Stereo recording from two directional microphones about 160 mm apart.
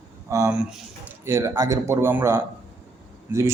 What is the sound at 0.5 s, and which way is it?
A man's voice, 10° right (ahead or behind).